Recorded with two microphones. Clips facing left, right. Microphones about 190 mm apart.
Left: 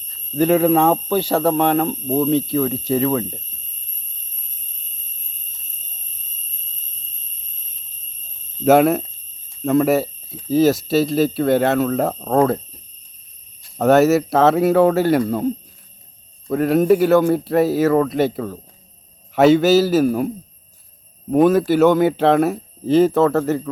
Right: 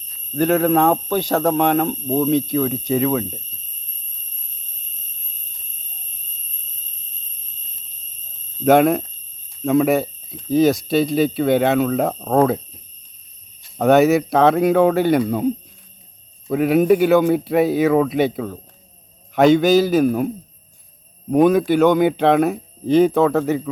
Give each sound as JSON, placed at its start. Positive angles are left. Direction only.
{"t": 0.3, "sound": "speech", "side_deg": 10}
{"t": 8.6, "sound": "speech", "side_deg": 5}